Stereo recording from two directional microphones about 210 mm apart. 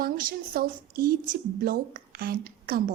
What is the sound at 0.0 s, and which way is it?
A woman's voice, 45° right (ahead or behind).